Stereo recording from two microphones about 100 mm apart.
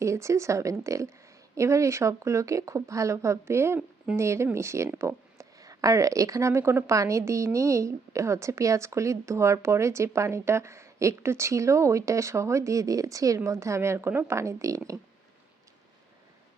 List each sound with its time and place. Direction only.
0.0 s speech: 30° right (ahead or behind)
3.8 s speech: 10° right (ahead or behind)
4.2 s speech: 25° right (ahead or behind)